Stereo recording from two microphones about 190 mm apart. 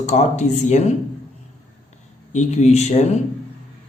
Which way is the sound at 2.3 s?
35° left (ahead or behind).